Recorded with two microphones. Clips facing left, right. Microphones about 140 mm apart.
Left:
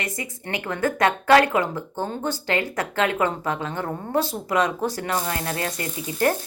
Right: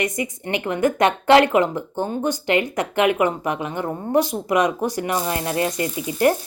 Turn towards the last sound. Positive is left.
turn(degrees=-15)  # may be behind; listen again after turning